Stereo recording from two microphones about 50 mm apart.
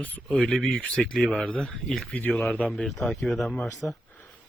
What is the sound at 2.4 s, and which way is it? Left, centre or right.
Speech, left.